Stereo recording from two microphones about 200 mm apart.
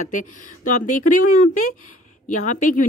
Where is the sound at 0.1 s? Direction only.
40° left (ahead or behind).